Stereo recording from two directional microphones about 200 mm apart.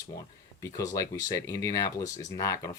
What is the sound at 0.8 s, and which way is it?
Speech, 15° left (ahead or behind).